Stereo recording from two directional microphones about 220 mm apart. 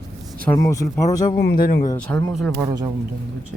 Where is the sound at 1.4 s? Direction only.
45° left (ahead or behind).